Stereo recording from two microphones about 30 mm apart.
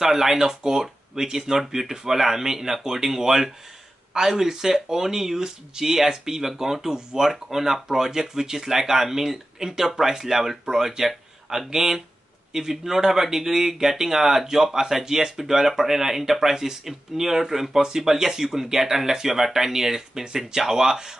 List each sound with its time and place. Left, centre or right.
0.0 s speech: centre